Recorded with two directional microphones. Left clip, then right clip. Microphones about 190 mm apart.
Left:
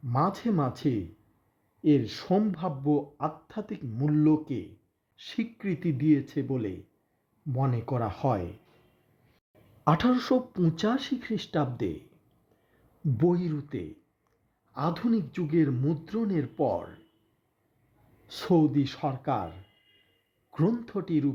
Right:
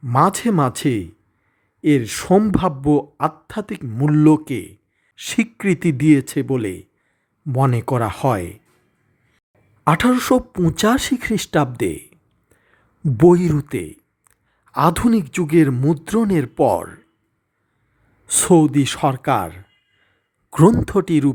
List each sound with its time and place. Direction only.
0.0 s speech: 35° right (ahead or behind)
1.8 s speech: 25° right (ahead or behind)
2.1 s speech: 35° right (ahead or behind)
10.1 s speech: 35° right (ahead or behind)
10.8 s speech: 40° right (ahead or behind)
13.1 s speech: 45° right (ahead or behind)
18.3 s speech: 35° right (ahead or behind)